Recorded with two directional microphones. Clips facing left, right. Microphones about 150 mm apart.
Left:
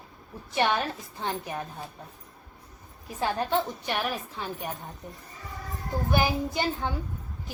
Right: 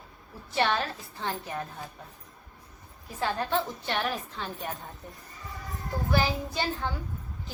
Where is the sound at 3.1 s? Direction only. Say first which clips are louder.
Left 2 dB; 20° left (ahead or behind).